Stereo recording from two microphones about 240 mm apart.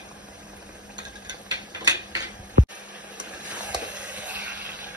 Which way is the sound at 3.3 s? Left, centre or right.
Centre.